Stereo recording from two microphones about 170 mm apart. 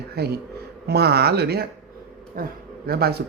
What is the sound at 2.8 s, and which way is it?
Speech, 65° right (ahead or behind).